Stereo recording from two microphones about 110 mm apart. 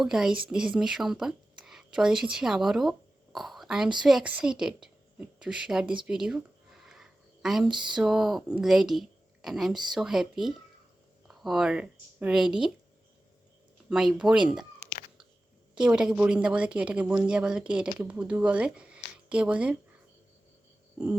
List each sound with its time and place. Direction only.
0.0 s a woman's voice: 5° right (ahead or behind)
6.8 s a sound: 5° right (ahead or behind)
7.9 s speech: 5° right (ahead or behind)
13.9 s speech: 5° right (ahead or behind)
15.7 s a woman's voice: 10° right (ahead or behind)